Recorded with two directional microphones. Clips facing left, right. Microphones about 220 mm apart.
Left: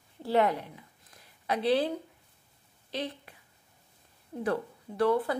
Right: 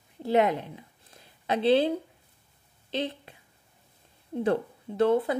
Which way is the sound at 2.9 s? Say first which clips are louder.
Right 4 dB; 25° right (ahead or behind).